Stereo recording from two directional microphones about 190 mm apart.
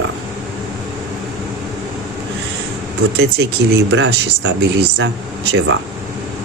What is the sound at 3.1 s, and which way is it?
Speech, 60° right (ahead or behind).